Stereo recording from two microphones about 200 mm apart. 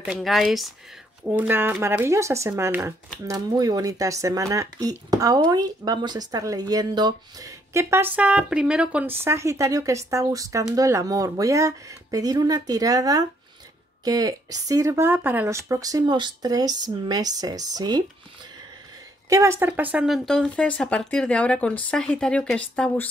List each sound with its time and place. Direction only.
0.0 s speech: centre (ahead or behind); by 18.0 s 20° right (ahead or behind)
19.2 s speech: 15° right (ahead or behind); by 22.6 s 5° left (ahead or behind)